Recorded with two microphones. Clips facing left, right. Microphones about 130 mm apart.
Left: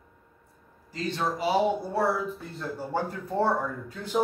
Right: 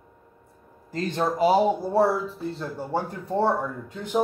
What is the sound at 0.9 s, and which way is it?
Speech, 50° right (ahead or behind).